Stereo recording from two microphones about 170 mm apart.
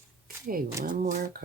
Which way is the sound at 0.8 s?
55° right (ahead or behind).